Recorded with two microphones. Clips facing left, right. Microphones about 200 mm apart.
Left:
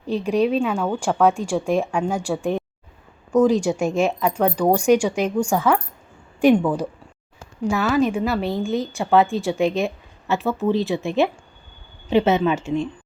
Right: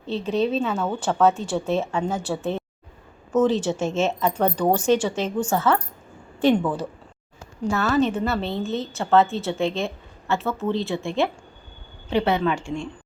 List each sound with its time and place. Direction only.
0.0 s a woman's voice: 10° left (ahead or behind)